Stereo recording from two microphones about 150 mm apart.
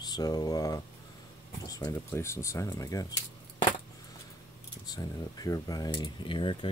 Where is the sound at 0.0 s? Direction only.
25° left (ahead or behind).